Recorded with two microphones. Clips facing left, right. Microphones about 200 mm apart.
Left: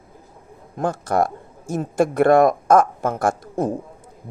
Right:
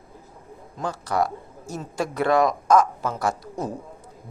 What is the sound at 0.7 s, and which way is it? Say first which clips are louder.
Speech: left 5 dB; 50° left (ahead or behind).